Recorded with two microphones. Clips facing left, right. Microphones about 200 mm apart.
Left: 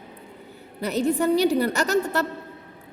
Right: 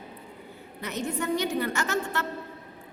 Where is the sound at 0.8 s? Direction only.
35° left (ahead or behind).